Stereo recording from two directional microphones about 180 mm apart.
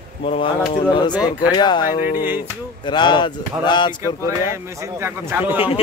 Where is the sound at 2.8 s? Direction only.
25° left (ahead or behind).